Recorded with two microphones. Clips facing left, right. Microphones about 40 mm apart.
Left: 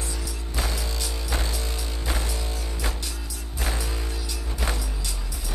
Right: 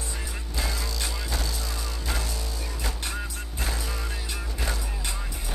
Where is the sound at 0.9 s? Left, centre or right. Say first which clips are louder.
Even; right.